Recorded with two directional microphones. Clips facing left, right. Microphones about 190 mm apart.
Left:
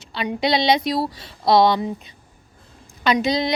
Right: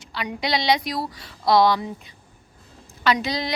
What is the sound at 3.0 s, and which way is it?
Speech, 20° left (ahead or behind).